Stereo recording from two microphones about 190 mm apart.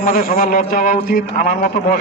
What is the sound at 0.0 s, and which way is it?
A man's voice, 45° left (ahead or behind).